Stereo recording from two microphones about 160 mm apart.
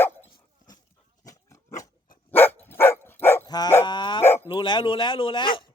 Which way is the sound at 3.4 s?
25° left (ahead or behind).